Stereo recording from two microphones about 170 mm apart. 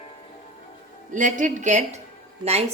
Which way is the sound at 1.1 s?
50° right (ahead or behind).